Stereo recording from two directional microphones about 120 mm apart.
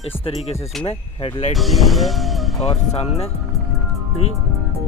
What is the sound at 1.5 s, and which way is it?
Speech, centre (ahead or behind).